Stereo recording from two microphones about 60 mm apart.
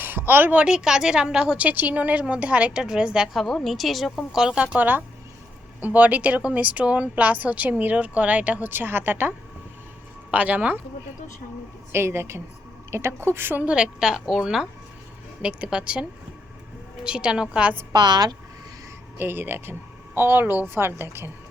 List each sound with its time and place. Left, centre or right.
0.0 s a sound: right
0.5 s a woman's voice: centre
1.6 s speech: right; by 3.2 s centre
3.3 s a woman's voice: centre
4.5 s speech: right
10.3 s speech: right
11.9 s a woman's voice: right
13.7 s a woman's voice: centre
19.2 s a woman's voice: right